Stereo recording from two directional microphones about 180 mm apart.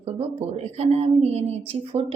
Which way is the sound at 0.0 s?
35° right (ahead or behind).